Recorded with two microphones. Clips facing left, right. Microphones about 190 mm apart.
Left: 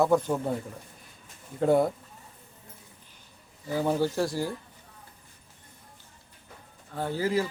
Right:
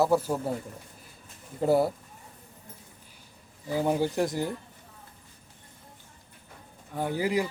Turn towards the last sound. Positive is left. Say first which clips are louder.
# even
turn(degrees=-15)  # may be behind; listen again after turning